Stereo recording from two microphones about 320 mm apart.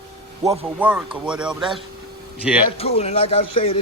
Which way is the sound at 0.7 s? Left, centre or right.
Centre.